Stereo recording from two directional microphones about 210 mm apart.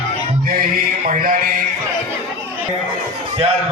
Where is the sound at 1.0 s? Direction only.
40° right (ahead or behind).